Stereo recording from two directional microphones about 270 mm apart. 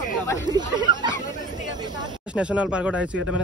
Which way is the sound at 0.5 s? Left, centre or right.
Centre.